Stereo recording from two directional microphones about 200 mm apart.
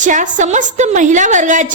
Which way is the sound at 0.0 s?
40° right (ahead or behind).